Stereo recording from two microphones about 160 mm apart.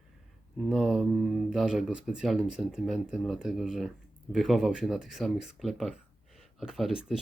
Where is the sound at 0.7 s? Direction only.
5° right (ahead or behind).